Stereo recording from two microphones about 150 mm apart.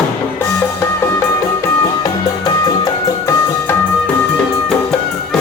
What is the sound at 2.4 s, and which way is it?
Music, 25° left (ahead or behind).